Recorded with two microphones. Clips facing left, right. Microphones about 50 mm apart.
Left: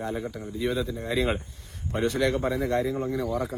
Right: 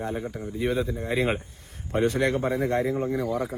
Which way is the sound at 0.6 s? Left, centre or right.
Right.